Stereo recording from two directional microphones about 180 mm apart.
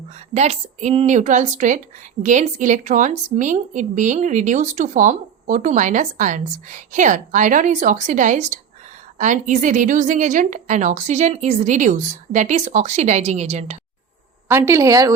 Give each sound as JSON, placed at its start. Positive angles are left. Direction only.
{"t": 0.3, "sound": "a woman's voice", "side_deg": -35}
{"t": 14.4, "sound": "a woman's voice", "side_deg": -15}